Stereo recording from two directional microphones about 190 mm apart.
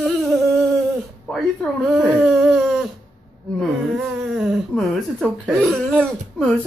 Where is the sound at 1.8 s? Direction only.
Centre (ahead or behind).